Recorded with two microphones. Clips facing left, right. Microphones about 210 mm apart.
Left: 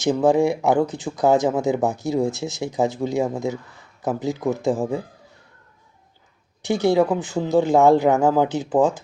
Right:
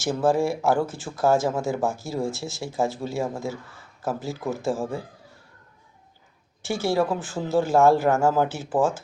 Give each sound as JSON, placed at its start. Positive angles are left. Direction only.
{"t": 0.0, "sound": "speech", "side_deg": 15}
{"t": 6.6, "sound": "speech", "side_deg": 15}